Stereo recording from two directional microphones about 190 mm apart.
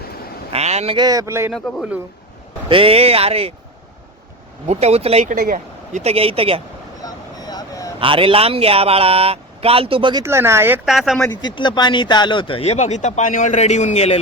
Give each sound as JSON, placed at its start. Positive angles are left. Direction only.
{"t": 0.5, "sound": "a man's voice", "side_deg": -35}
{"t": 0.9, "sound": "speech", "side_deg": -20}
{"t": 1.5, "sound": "speech", "side_deg": -5}
{"t": 2.6, "sound": "a man's voice", "side_deg": -30}
{"t": 4.6, "sound": "a man's voice", "side_deg": -35}
{"t": 7.0, "sound": "vehicle", "side_deg": 20}
{"t": 7.9, "sound": "a man's voice", "side_deg": -30}
{"t": 10.2, "sound": "speech", "side_deg": -15}
{"t": 10.8, "sound": "speech", "side_deg": 0}
{"t": 11.5, "sound": "speech", "side_deg": 25}